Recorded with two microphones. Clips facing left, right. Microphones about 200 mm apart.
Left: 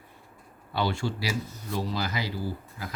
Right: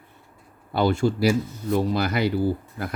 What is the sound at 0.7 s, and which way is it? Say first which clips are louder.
Speech: right 8 dB; 50° right (ahead or behind).